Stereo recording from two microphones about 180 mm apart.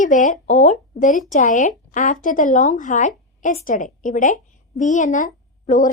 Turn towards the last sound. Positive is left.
turn(degrees=45)  # may be behind; listen again after turning